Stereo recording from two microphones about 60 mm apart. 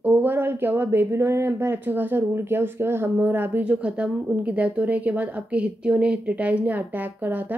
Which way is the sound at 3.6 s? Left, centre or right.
Right.